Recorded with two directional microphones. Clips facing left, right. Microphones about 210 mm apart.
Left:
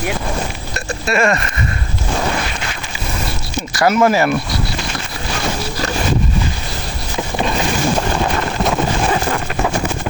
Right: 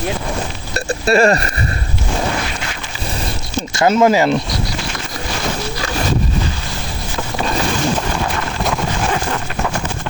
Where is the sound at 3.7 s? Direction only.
25° right (ahead or behind).